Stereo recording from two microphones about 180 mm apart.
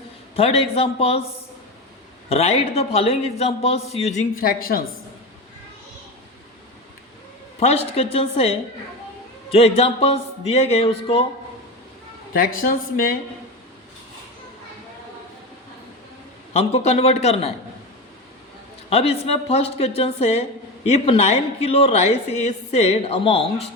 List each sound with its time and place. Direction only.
0.3 s speech: 35° left (ahead or behind)
2.3 s speech: 35° left (ahead or behind); by 4.8 s 55° left (ahead or behind)
7.6 s speech: 35° left (ahead or behind)
12.3 s speech: 50° left (ahead or behind)
16.5 s speech: 35° left (ahead or behind)
18.9 s speech: 35° left (ahead or behind)